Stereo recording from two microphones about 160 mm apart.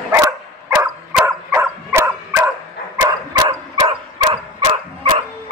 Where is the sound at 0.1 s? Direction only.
20° right (ahead or behind).